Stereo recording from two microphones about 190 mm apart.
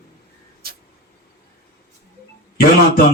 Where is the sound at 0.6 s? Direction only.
55° right (ahead or behind).